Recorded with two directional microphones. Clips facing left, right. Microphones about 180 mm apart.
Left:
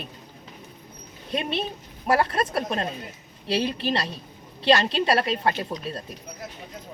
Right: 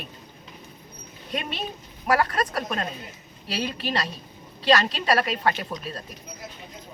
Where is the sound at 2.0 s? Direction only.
25° left (ahead or behind).